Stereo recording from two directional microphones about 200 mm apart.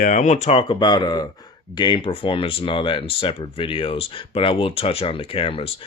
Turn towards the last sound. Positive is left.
turn(degrees=25)  # may be behind; listen again after turning